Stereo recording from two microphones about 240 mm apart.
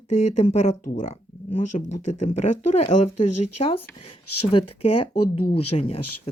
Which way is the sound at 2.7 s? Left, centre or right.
Left.